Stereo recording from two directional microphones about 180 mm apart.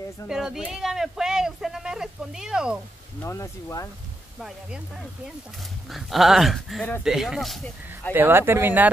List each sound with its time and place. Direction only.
0.3 s speech: 5° right (ahead or behind)
3.2 s speech: 15° left (ahead or behind)
4.4 s speech: 5° right (ahead or behind)
8.1 s speech: 10° right (ahead or behind)